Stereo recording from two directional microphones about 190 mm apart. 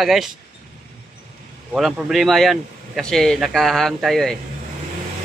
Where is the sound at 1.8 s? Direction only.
Centre (ahead or behind).